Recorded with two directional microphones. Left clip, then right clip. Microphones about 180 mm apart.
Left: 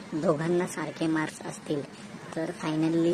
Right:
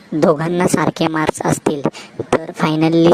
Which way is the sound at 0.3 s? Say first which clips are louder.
Right 11 dB; 40° right (ahead or behind).